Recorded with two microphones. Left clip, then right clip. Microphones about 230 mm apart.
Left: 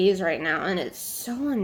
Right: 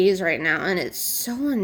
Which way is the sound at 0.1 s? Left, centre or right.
Right.